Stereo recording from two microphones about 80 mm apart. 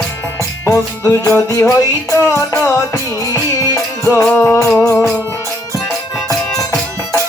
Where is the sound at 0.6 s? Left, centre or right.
Left.